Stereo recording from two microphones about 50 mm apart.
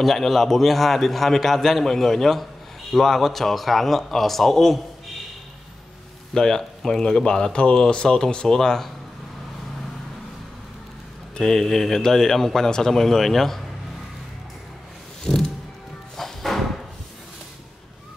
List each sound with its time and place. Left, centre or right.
0.0 s a man's voice: centre
6.3 s speech: centre
11.3 s speech: centre
15.2 s music: centre